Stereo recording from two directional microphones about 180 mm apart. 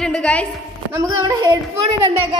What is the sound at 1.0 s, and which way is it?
Speech, 20° right (ahead or behind).